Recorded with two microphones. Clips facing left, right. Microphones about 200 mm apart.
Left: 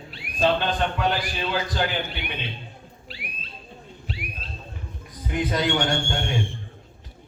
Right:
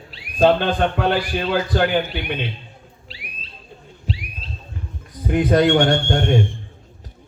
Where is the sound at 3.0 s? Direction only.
50° left (ahead or behind).